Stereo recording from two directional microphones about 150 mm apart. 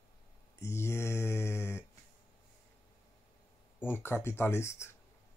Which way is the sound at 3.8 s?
15° left (ahead or behind).